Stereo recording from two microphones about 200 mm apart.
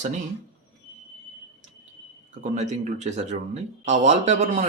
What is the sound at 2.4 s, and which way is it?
Speech, 35° right (ahead or behind).